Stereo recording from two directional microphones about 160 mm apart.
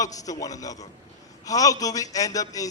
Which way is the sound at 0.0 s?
20° left (ahead or behind).